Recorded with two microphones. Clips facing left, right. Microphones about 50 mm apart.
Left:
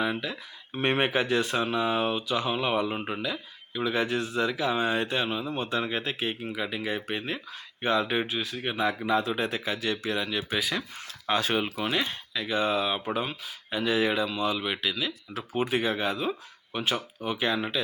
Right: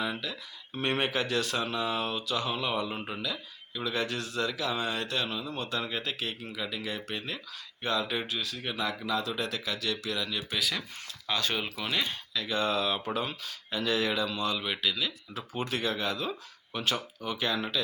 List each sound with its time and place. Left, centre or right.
0.0 s speech: left